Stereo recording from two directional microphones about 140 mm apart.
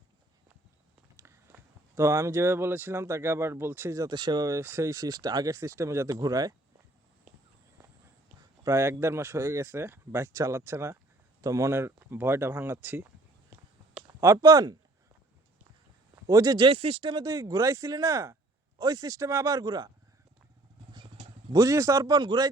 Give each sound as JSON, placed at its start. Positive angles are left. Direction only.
{"t": 1.1, "sound": "speech", "side_deg": -20}
{"t": 8.6, "sound": "speech", "side_deg": -20}
{"t": 14.2, "sound": "speech", "side_deg": -25}
{"t": 16.2, "sound": "speech", "side_deg": -25}
{"t": 20.9, "sound": "wild animals", "side_deg": -35}
{"t": 21.5, "sound": "speech", "side_deg": -25}